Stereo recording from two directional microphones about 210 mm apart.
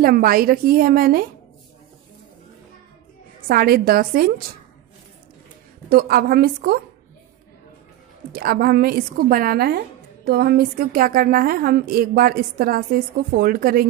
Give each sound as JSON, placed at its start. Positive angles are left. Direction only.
{"t": 0.0, "sound": "a woman's voice", "side_deg": -45}
{"t": 3.3, "sound": "a woman's voice", "side_deg": -45}
{"t": 5.9, "sound": "a woman's voice", "side_deg": -45}
{"t": 8.3, "sound": "a woman's voice", "side_deg": -45}